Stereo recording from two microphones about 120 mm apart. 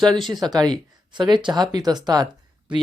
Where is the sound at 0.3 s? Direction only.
35° right (ahead or behind).